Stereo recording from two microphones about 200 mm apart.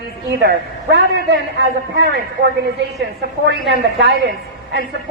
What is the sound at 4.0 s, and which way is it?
Speech, 55° right (ahead or behind).